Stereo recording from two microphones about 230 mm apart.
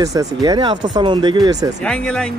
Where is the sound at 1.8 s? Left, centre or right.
Centre.